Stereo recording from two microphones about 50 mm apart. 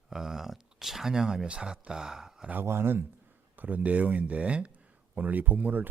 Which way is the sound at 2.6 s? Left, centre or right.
Right.